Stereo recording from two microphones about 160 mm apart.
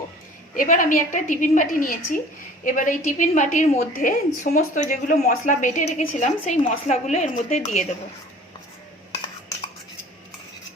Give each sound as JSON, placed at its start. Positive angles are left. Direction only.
{"t": 0.5, "sound": "a woman's voice", "side_deg": 55}